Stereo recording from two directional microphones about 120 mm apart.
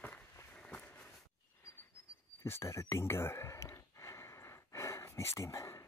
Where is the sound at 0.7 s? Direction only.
15° left (ahead or behind).